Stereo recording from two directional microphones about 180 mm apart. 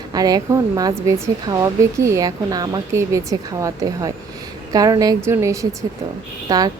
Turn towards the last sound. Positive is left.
turn(degrees=-20)  # may be behind; listen again after turning